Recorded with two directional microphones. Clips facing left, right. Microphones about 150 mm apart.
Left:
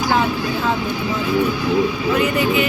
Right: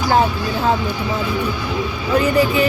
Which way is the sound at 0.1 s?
40° right (ahead or behind).